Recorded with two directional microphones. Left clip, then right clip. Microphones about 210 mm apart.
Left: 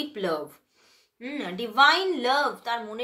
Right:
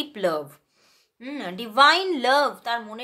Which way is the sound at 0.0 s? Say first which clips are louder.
Right 4 dB; 40° right (ahead or behind).